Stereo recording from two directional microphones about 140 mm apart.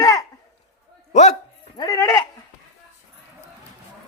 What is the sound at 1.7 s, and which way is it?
Speech, 25° left (ahead or behind).